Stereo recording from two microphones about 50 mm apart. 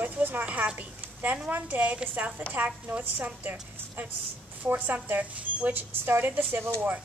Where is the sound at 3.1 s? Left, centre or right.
Right.